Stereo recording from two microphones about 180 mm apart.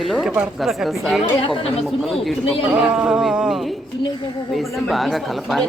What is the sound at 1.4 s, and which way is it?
Speech, 30° left (ahead or behind).